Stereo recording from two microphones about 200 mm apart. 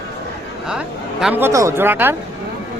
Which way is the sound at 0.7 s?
5° right (ahead or behind).